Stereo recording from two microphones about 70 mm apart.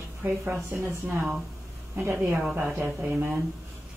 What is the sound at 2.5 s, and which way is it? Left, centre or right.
Speech, right.